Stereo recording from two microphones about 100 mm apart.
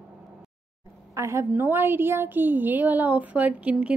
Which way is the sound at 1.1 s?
30° right (ahead or behind).